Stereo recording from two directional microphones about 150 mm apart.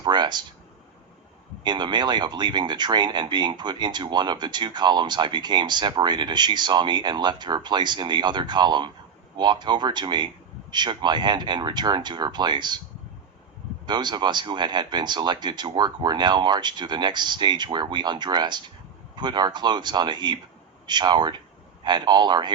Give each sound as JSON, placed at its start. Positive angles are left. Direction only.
{"t": 0.0, "sound": "a sound", "side_deg": -30}
{"t": 1.6, "sound": "speech", "side_deg": -30}
{"t": 13.8, "sound": "speech", "side_deg": -30}